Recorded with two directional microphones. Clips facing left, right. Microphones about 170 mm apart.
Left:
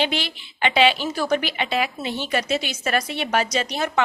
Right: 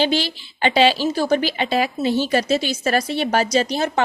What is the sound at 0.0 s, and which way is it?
A woman's voice, 35° right (ahead or behind).